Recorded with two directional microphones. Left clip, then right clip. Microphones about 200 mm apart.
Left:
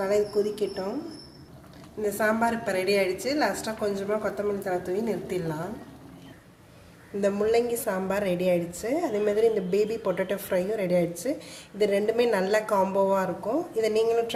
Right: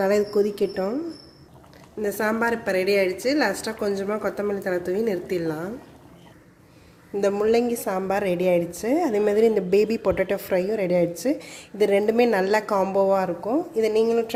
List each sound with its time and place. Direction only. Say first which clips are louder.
0.0 s speech: right 4 dB; 45° right (ahead or behind)
2.0 s a woman's voice: right 1 dB; 40° right (ahead or behind)
7.2 s a woman's voice: right 3 dB; 40° right (ahead or behind)